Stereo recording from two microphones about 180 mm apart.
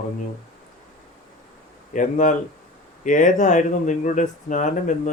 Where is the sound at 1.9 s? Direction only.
45° left (ahead or behind).